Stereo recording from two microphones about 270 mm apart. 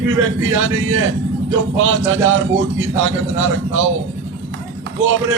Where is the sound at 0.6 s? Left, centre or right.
Right.